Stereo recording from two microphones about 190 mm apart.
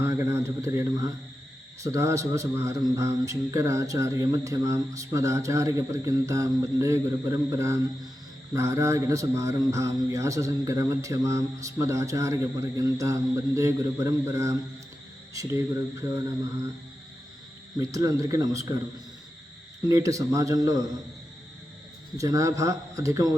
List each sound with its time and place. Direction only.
0.0 s a man's voice: 15° right (ahead or behind)
17.7 s a man's voice: 20° right (ahead or behind)
19.8 s a man's voice: 15° right (ahead or behind)
22.2 s a man's voice: 15° right (ahead or behind)